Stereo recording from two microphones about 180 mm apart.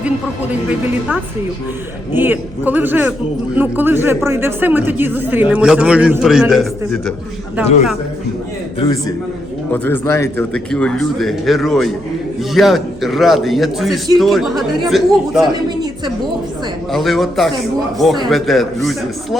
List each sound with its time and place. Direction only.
2.1 s a man's voice: 10° right (ahead or behind)
8.8 s a man's voice: 20° left (ahead or behind)
9.7 s a man's voice: 10° left (ahead or behind)
16.9 s a man's voice: centre (ahead or behind)